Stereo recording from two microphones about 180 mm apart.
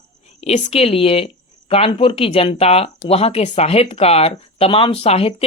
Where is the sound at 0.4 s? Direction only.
35° left (ahead or behind).